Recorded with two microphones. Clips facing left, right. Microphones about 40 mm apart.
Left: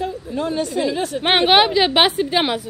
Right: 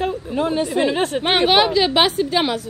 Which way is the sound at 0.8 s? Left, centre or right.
Right.